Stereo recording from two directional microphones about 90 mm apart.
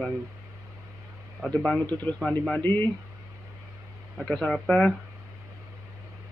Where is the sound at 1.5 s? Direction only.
15° left (ahead or behind).